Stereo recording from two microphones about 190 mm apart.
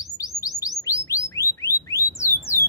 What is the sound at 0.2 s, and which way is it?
Bird, 15° left (ahead or behind).